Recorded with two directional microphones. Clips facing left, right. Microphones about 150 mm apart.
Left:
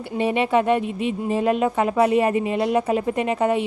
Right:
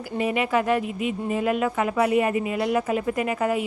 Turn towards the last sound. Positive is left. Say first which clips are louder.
# left 3 dB
turn(degrees=30)  # may be behind; listen again after turning